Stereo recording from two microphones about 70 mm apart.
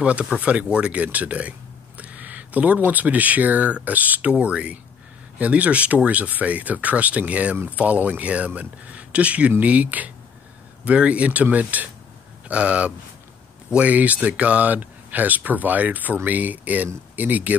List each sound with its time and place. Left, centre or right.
0.0 s speech: centre